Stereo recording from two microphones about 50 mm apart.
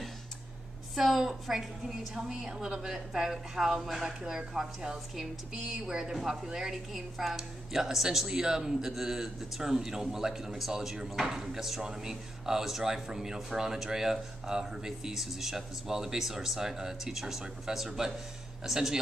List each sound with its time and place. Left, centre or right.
0.9 s a woman's voice: centre